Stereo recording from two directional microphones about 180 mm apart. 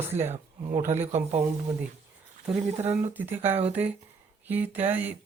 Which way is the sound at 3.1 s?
10° right (ahead or behind).